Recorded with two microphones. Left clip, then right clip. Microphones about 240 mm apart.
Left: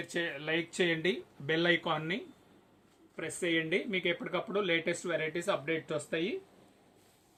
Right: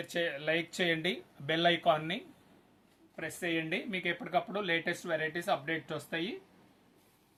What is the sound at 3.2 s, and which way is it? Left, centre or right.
Speech, right.